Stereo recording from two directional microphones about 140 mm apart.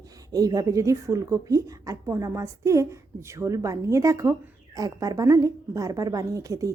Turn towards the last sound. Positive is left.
turn(degrees=-25)  # may be behind; listen again after turning